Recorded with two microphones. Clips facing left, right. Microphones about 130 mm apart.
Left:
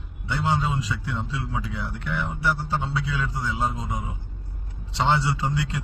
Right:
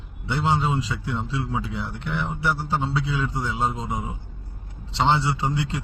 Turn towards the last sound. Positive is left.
turn(degrees=-25)  # may be behind; listen again after turning